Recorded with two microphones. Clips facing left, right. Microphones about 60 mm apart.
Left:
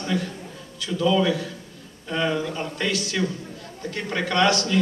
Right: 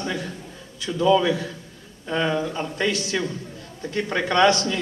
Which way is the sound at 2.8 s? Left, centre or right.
Right.